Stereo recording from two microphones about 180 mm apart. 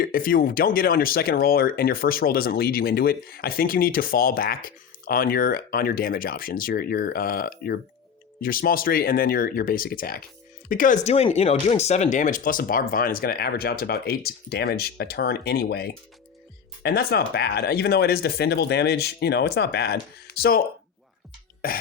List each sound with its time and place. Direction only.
0.0 s speech: 50° left (ahead or behind)